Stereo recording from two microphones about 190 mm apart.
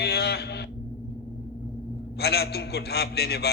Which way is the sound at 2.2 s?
60° left (ahead or behind).